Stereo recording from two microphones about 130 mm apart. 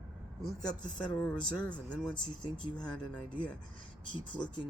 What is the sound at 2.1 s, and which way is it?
Speech, 35° left (ahead or behind).